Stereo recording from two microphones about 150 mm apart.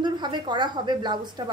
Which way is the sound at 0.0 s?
30° right (ahead or behind).